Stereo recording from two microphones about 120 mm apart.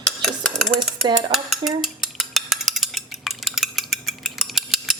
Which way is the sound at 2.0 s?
Centre (ahead or behind).